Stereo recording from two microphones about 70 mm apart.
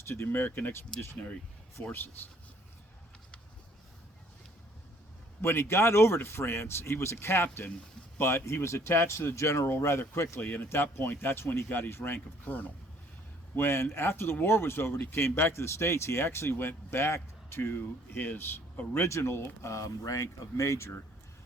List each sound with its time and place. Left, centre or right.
0.1 s speech: left
0.9 s speech: centre
1.8 s a man's voice: left
5.4 s speech: left
10.3 s speech: left
19.7 s speech: left